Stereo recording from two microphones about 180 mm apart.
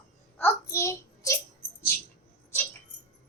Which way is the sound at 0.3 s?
15° left (ahead or behind).